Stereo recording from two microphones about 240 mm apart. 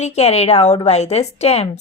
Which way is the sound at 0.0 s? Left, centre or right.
Left.